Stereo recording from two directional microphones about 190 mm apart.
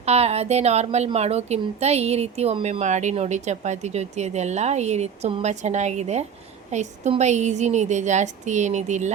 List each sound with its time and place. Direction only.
0.0 s a woman's voice: 35° right (ahead or behind)